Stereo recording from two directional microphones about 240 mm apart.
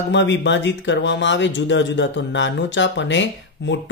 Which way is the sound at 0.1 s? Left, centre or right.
Left.